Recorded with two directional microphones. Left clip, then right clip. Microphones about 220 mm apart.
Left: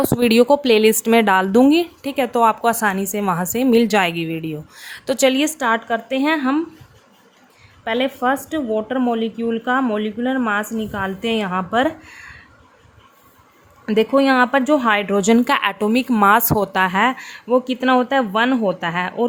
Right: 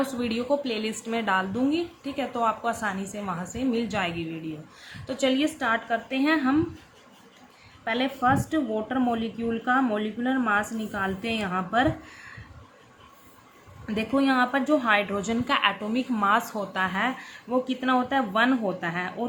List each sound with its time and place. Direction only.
0.2 s speech: 55° left (ahead or behind)
7.9 s speech: 40° left (ahead or behind)
13.8 s speech: 40° left (ahead or behind)